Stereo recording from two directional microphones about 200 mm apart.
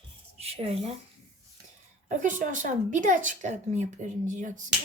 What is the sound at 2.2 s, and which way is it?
Speech, 40° right (ahead or behind).